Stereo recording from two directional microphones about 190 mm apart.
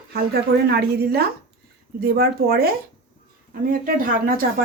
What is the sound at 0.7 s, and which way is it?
A woman's voice, 55° right (ahead or behind).